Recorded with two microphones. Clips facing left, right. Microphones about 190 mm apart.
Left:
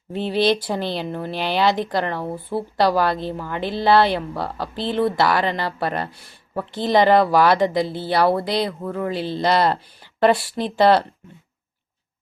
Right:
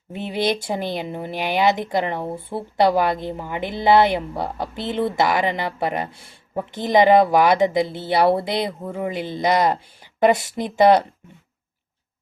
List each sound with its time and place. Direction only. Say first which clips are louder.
0.1 s speech: left 3 dB; 15° right (ahead or behind)